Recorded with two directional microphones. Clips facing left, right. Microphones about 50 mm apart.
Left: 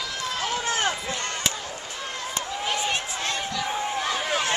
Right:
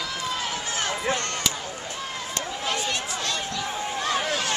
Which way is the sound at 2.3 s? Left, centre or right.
Centre.